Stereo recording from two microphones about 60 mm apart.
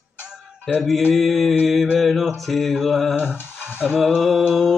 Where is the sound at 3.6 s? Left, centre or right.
Right.